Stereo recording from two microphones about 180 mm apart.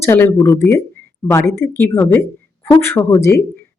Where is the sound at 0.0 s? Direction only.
15° left (ahead or behind).